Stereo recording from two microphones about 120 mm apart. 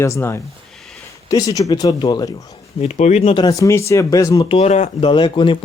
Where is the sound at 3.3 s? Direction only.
35° left (ahead or behind).